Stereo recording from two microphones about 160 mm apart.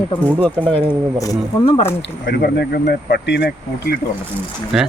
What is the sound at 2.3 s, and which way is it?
Speech, 85° left.